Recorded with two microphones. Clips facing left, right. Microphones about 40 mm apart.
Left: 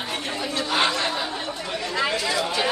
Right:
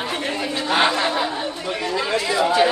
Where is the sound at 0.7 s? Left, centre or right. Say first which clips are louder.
Right 5 dB; right.